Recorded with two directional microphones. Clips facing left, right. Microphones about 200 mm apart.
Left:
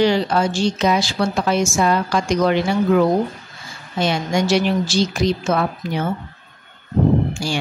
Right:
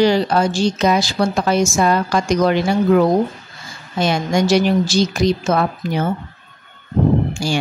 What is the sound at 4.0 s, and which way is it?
Speech, 45° right (ahead or behind).